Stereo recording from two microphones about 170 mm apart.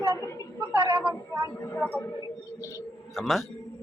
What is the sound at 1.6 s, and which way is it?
Speech, 15° left (ahead or behind).